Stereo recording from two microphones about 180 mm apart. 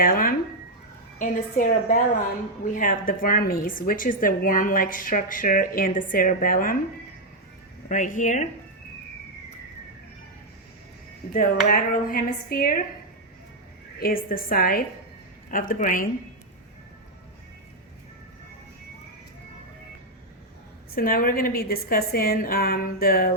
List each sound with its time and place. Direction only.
0.0 s a woman's voice: 55° left (ahead or behind)
7.9 s a woman's voice: 45° left (ahead or behind)
11.3 s a woman's voice: 50° left (ahead or behind)
14.0 s a woman's voice: 55° left (ahead or behind)
20.9 s a woman's voice: 55° left (ahead or behind)